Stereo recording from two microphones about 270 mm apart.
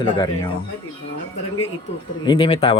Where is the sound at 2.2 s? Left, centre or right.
Centre.